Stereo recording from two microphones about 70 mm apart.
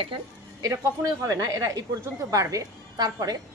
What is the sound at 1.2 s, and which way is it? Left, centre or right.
A woman's voice, right.